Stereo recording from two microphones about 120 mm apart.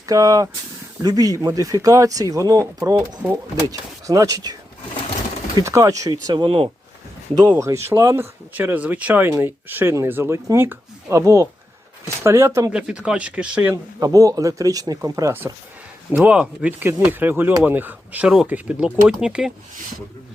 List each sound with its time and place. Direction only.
0.0 s speech: 30° right (ahead or behind)
5.5 s speech: 25° right (ahead or behind); by 6.7 s 45° right (ahead or behind)
7.5 s speech: 20° right (ahead or behind)
12.7 s speech: 5° right (ahead or behind)
14.0 s speech: 30° right (ahead or behind)
16.1 s speech: 10° right (ahead or behind)